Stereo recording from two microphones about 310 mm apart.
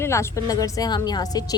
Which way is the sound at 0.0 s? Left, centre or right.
Centre.